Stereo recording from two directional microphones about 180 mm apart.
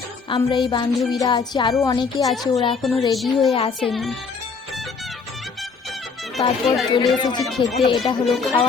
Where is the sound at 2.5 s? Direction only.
25° left (ahead or behind).